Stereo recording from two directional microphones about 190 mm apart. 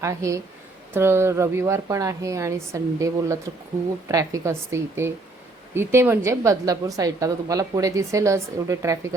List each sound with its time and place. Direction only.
0.0 s a woman's voice: 15° right (ahead or behind)